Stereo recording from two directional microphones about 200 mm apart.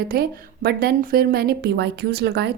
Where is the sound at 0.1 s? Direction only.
50° right (ahead or behind).